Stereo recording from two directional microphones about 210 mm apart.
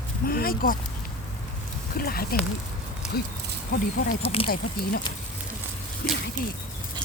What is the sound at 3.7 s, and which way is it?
Speech, 45° left (ahead or behind).